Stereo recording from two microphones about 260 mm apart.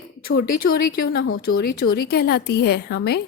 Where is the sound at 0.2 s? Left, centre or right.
Left.